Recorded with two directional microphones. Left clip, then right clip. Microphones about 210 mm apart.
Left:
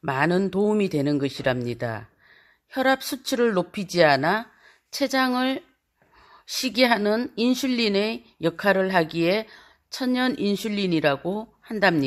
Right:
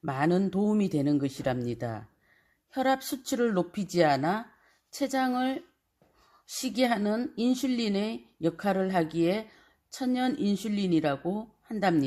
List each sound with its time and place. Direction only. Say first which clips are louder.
0.0 s speech: left 5 dB; 10° left (ahead or behind)